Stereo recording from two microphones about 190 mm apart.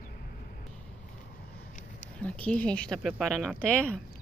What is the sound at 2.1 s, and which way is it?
Speech, 5° left (ahead or behind).